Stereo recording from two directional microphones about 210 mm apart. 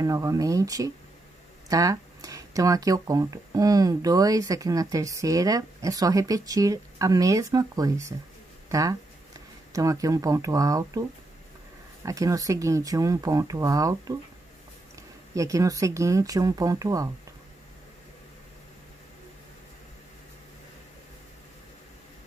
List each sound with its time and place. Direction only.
0.0 s speech: 15° right (ahead or behind)
8.6 s a sound: 15° right (ahead or behind)
9.7 s speech: 15° right (ahead or behind)
15.3 s speech: 15° right (ahead or behind)